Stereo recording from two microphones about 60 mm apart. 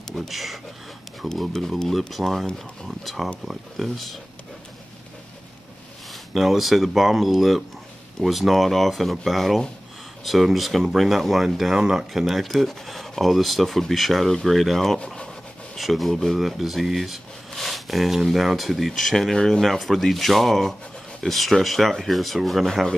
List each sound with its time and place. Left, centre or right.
0.1 s speech: centre
6.3 s speech: centre
15.0 s speech: centre
15.7 s speech: centre